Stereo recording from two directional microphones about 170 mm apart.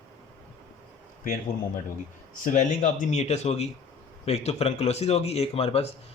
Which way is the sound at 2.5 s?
45° left (ahead or behind).